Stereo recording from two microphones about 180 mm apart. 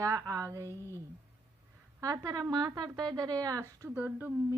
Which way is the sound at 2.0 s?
20° right (ahead or behind).